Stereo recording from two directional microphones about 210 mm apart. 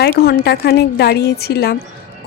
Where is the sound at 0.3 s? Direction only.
50° left (ahead or behind).